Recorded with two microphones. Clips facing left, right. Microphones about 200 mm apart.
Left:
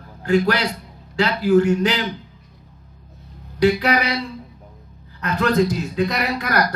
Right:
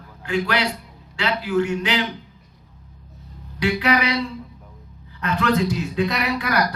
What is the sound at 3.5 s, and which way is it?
Speech, 40° left (ahead or behind).